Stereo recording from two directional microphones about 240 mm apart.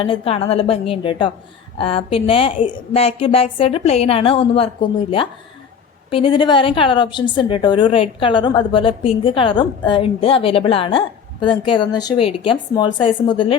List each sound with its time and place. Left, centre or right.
0.0 s a woman's voice: left